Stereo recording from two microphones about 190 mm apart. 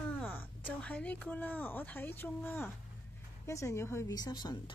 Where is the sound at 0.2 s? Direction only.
10° left (ahead or behind).